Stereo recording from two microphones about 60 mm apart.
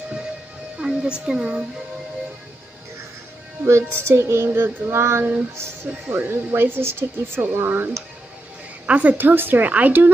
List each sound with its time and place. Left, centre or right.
0.7 s speech: centre
3.6 s music: right
5.6 s speech: right
8.8 s a woman's voice: right
9.1 s speech: right